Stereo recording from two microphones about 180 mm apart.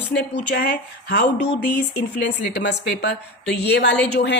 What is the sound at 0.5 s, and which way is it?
Speech, 65° left (ahead or behind).